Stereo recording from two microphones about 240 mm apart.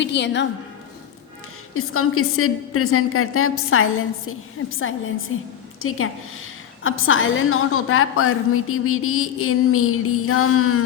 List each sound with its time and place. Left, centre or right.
0.0 s a woman's voice: left
1.7 s a woman's voice: left